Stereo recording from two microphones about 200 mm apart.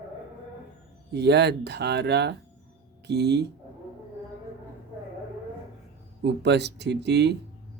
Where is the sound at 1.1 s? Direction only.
55° right (ahead or behind).